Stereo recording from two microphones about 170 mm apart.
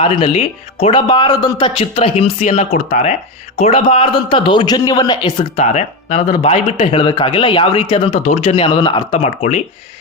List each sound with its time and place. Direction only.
0.0 s speech: 35° left (ahead or behind)
5.5 s speech: 40° left (ahead or behind)
9.1 s speech: 40° left (ahead or behind)